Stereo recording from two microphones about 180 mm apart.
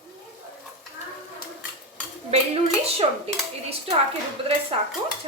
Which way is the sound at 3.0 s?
35° right (ahead or behind).